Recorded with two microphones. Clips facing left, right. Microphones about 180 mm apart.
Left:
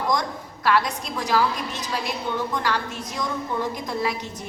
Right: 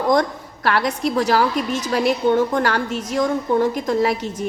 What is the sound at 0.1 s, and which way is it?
A woman's voice, 60° right (ahead or behind).